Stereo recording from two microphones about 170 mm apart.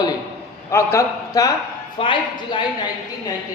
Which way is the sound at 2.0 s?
30° left (ahead or behind).